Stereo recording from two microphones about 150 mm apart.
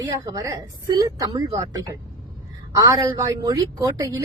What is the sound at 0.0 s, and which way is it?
A woman's voice, 25° right (ahead or behind).